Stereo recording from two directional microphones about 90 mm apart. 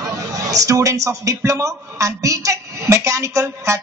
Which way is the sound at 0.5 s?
40° right (ahead or behind).